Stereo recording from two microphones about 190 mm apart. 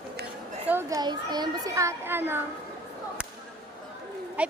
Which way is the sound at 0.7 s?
15° right (ahead or behind).